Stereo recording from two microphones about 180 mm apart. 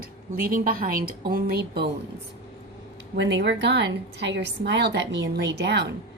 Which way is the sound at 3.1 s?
80° right.